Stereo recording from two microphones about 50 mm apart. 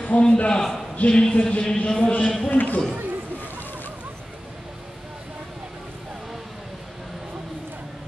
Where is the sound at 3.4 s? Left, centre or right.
Left.